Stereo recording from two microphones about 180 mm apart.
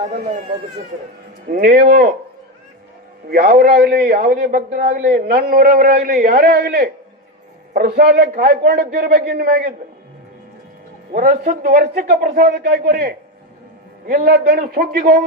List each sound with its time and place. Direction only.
0.0 s speech: 40° right (ahead or behind)
1.5 s speech: 50° right (ahead or behind)
3.2 s a man's voice: 55° right (ahead or behind)
11.1 s a man's voice: 50° right (ahead or behind)